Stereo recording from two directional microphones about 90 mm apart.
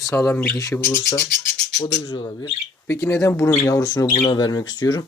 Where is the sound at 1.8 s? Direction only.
65° left (ahead or behind).